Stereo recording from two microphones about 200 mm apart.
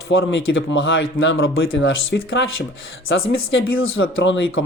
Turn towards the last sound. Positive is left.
turn(degrees=65)  # may be behind; listen again after turning